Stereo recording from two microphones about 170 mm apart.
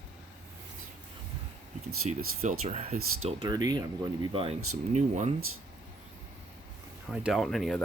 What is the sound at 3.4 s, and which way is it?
Speech, 25° right (ahead or behind).